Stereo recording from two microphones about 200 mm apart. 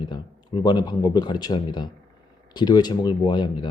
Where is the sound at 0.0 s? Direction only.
20° left (ahead or behind).